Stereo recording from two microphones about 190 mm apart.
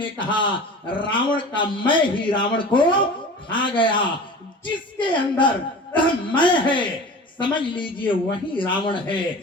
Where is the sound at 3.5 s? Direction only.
25° left (ahead or behind).